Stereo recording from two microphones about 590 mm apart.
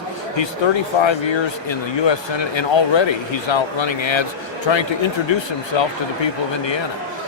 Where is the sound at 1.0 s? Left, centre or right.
Left.